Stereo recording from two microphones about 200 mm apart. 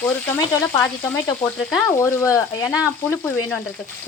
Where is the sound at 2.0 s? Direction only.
15° left (ahead or behind).